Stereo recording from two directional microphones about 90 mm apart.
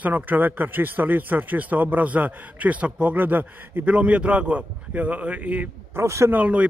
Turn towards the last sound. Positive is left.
turn(degrees=-15)  # may be behind; listen again after turning